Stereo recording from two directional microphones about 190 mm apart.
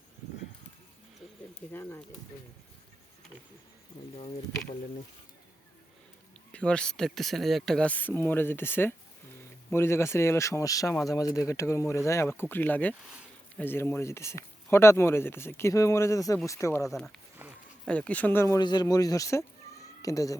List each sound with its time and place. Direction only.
1.7 s speech: 10° left (ahead or behind)
6.5 s speech: 5° left (ahead or behind)
17.4 s a sound: 10° right (ahead or behind)
17.8 s speech: 5° left (ahead or behind)